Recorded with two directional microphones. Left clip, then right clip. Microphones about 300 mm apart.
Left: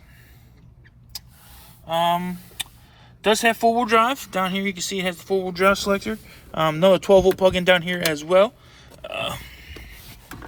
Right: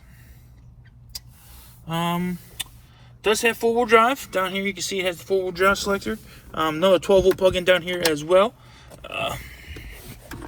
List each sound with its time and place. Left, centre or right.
1.9 s speech: left; by 10.3 s centre